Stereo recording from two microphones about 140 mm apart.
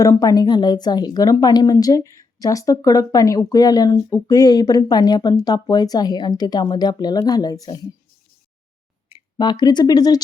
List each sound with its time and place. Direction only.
0.0 s a woman's voice: 25° left (ahead or behind)
9.1 s speech: 30° left (ahead or behind)